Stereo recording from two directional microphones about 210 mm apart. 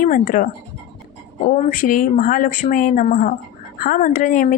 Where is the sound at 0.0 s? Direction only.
40° left (ahead or behind).